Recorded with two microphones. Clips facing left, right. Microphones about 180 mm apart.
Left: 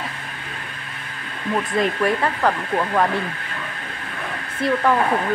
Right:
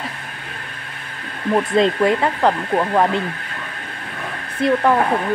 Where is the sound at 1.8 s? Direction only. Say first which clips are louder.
Right 4 dB; 25° right (ahead or behind).